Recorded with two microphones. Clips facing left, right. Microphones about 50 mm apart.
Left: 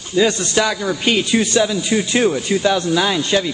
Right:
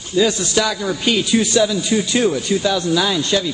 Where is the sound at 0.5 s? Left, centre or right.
Left.